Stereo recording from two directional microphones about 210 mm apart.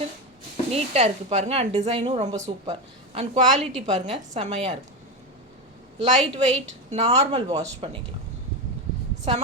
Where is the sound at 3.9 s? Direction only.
35° right (ahead or behind).